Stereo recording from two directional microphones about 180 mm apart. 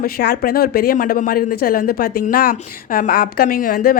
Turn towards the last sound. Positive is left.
turn(degrees=50)  # may be behind; listen again after turning